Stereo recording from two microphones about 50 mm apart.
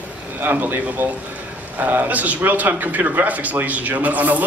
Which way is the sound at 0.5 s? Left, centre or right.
Right.